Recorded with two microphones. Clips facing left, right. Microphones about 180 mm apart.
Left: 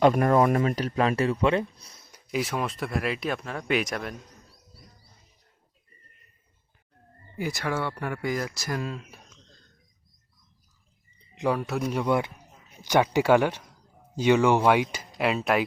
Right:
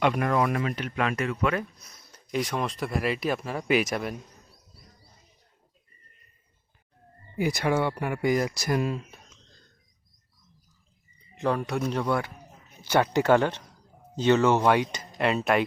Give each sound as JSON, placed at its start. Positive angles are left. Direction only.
{"t": 0.0, "sound": "speech", "side_deg": 40}
{"t": 2.1, "sound": "speech", "side_deg": 5}
{"t": 7.3, "sound": "speech", "side_deg": -15}
{"t": 9.0, "sound": "a sound", "side_deg": -5}
{"t": 11.3, "sound": "speech", "side_deg": 5}